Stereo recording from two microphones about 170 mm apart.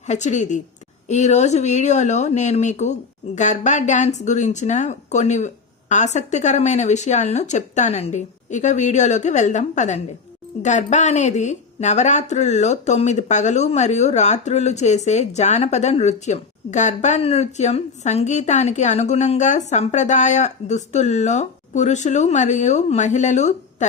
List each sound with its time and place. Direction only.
0.1 s speech: 45° left (ahead or behind)